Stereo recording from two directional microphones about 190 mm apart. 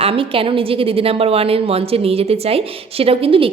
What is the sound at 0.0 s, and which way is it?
A woman's voice, 30° right (ahead or behind).